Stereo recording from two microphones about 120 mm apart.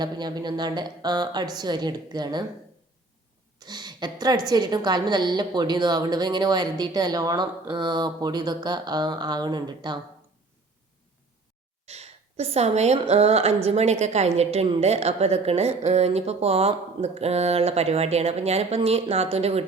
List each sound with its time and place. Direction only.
0.0 s a woman's voice: 35° right (ahead or behind)
3.6 s a woman's voice: 35° right (ahead or behind)
11.9 s a woman's voice: 60° right (ahead or behind)